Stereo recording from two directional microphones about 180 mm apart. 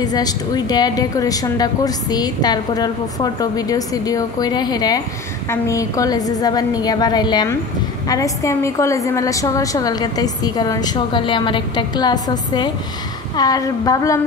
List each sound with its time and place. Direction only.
0.0 s speech: 20° left (ahead or behind)